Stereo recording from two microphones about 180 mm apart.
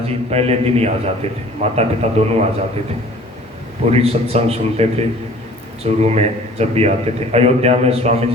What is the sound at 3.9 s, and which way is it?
Speech, 35° right (ahead or behind).